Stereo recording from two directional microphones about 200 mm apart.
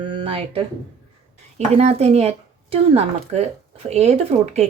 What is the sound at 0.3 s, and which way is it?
Speech, 30° right (ahead or behind).